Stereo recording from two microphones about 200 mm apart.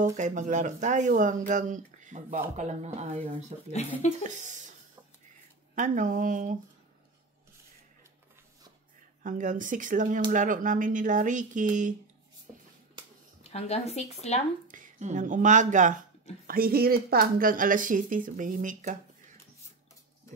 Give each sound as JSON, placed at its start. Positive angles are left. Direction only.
{"t": 0.0, "sound": "speech", "side_deg": -40}
{"t": 5.8, "sound": "speech", "side_deg": -40}
{"t": 9.2, "sound": "speech", "side_deg": -40}
{"t": 13.4, "sound": "a woman's voice", "side_deg": 30}
{"t": 14.7, "sound": "speech", "side_deg": -40}
{"t": 16.4, "sound": "speech", "side_deg": -50}